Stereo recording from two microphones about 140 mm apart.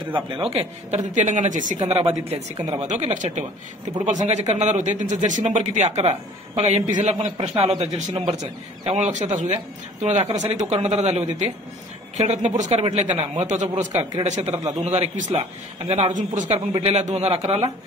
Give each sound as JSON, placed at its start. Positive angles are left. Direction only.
{"t": 0.0, "sound": "speech", "side_deg": -35}
{"t": 0.5, "sound": "a man's voice", "side_deg": -50}
{"t": 1.9, "sound": "a man's voice", "side_deg": -45}